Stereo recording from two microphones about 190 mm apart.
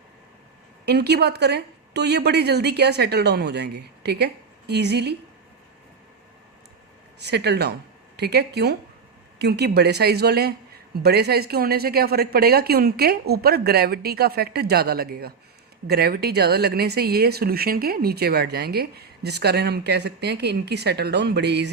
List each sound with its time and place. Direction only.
0.9 s speech: 60° right (ahead or behind)
7.2 s speech: 60° right (ahead or behind)